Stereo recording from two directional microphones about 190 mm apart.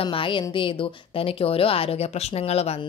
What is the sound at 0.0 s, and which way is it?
A woman's voice, 30° left (ahead or behind).